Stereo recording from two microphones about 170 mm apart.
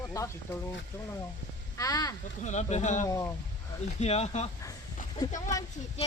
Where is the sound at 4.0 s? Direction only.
40° left (ahead or behind).